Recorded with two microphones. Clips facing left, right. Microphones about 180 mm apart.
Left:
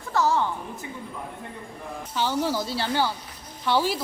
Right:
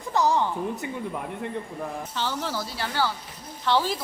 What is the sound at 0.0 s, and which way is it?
Speech, 15° right (ahead or behind).